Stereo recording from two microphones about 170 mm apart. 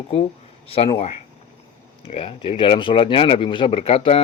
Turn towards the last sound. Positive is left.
turn(degrees=35)  # may be behind; listen again after turning